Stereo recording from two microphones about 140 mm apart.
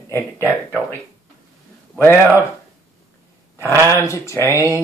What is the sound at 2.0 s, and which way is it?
Speech, 15° left (ahead or behind).